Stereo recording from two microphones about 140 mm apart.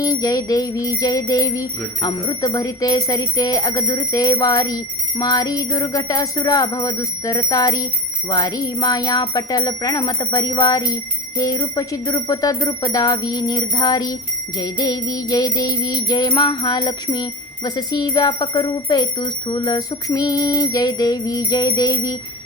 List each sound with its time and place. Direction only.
0.0 s music: 25° left (ahead or behind)